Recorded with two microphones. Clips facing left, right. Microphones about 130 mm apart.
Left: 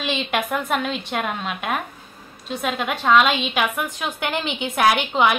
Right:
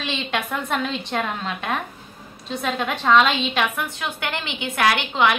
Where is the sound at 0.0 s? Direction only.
15° left (ahead or behind).